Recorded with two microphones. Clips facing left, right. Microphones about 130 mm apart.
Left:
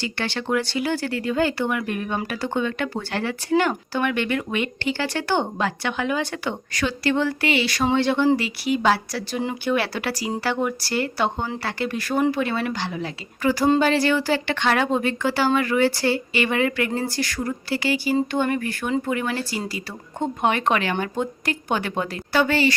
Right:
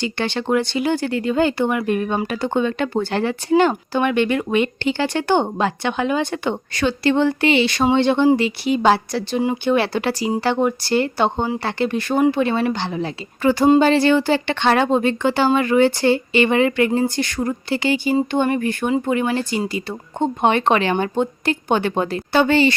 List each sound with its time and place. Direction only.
0.0 s speech: 20° right (ahead or behind)